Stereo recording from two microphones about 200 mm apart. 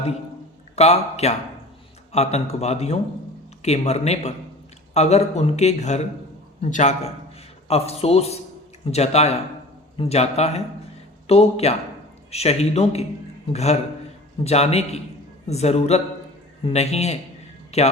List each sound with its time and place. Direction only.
0.8 s a man's voice: 30° left (ahead or behind)